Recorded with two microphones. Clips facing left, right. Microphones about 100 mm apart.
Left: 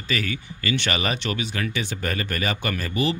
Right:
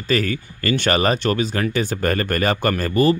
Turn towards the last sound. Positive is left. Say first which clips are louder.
# right 8 dB
turn(degrees=-45)  # may be behind; listen again after turning